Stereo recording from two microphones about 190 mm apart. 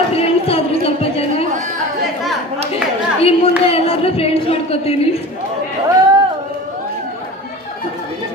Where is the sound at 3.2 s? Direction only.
30° left (ahead or behind).